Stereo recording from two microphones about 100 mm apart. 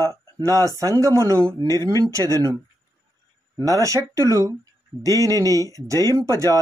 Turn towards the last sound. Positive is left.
turn(degrees=-35)  # may be behind; listen again after turning